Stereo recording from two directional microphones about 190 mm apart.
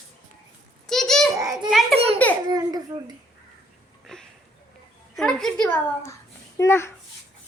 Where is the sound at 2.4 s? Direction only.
20° right (ahead or behind).